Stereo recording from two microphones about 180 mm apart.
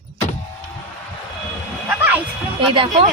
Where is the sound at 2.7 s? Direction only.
30° right (ahead or behind).